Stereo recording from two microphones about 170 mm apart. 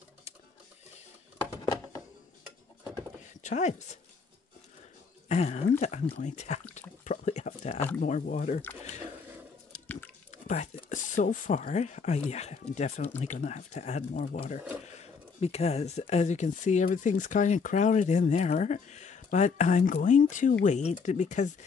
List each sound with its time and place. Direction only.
3.4 s speech: 45° left (ahead or behind)
5.3 s speech: 40° left (ahead or behind)
7.1 s a sound: 45° left (ahead or behind)
8.0 s speech: 50° left (ahead or behind)
9.7 s water: 10° left (ahead or behind)
10.4 s speech: 40° left (ahead or behind)